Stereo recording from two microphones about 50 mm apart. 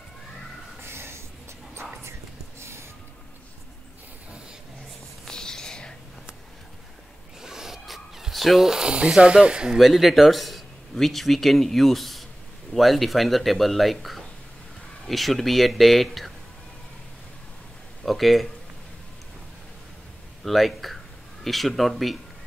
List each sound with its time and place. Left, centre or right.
0.8 s snort: right
5.3 s a sound: centre
7.4 s snake: centre
9.1 s speech: centre
9.8 s speech: centre
18.0 s speech: centre
20.4 s speech: centre